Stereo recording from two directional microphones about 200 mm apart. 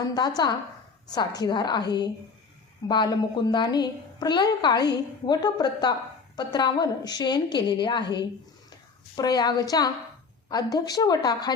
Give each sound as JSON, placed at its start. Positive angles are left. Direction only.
{"t": 0.0, "sound": "a woman's voice", "side_deg": 20}
{"t": 2.8, "sound": "a woman's voice", "side_deg": 20}